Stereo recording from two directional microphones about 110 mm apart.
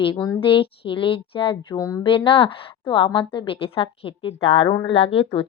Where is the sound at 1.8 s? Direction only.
30° left (ahead or behind).